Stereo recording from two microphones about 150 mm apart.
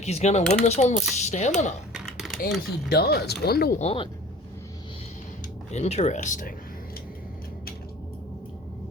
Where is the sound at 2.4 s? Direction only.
90° left.